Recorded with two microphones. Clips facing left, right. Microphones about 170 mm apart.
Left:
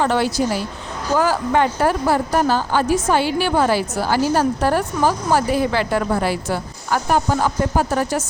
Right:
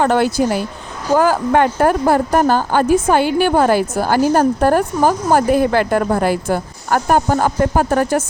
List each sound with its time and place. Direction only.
0.0 s speech: 50° right (ahead or behind)